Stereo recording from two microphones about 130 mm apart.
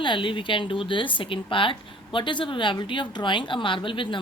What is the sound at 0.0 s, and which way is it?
A woman's voice, 40° left (ahead or behind).